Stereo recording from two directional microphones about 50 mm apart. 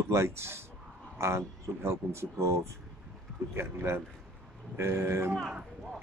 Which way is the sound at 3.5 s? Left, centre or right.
Right.